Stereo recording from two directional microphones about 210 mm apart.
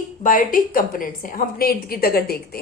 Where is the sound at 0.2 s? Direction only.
40° left (ahead or behind).